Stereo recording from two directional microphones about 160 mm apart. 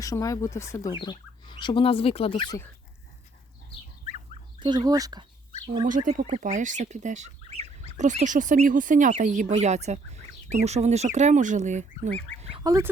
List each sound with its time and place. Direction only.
0.0 s speech: 20° left (ahead or behind)
4.6 s speech: 25° right (ahead or behind)
5.8 s speech: 50° right (ahead or behind)
12.6 s speech: 20° right (ahead or behind)